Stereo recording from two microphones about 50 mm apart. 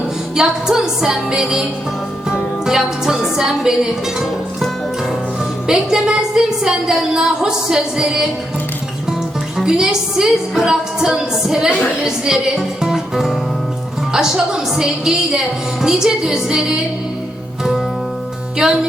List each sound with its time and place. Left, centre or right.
0.3 s a woman's voice: centre
5.6 s a woman's voice: centre
9.6 s a woman's voice: centre